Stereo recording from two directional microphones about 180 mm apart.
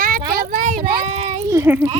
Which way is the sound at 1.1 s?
40° right (ahead or behind).